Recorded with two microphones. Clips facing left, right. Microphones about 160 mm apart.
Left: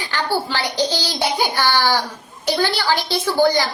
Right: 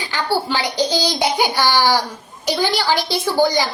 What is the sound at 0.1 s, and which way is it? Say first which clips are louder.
A child's voice: right 2 dB; 15° right (ahead or behind).